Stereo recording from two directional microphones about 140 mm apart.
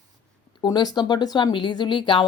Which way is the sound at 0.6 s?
30° left (ahead or behind).